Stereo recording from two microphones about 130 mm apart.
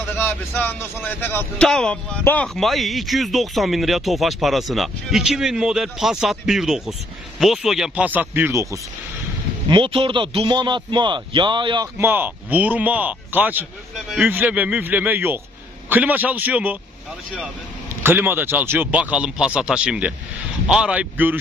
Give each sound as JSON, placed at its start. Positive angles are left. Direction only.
{"t": 0.2, "sound": "speech", "side_deg": 15}
{"t": 2.6, "sound": "speech", "side_deg": 0}
{"t": 9.6, "sound": "a man's voice", "side_deg": -40}
{"t": 11.9, "sound": "speech", "side_deg": -15}
{"t": 18.0, "sound": "speech", "side_deg": -15}